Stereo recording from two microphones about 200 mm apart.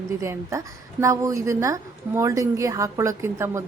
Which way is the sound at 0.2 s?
15° right (ahead or behind).